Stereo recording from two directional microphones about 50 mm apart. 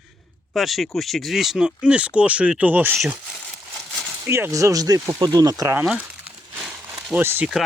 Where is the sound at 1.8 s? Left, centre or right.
Right.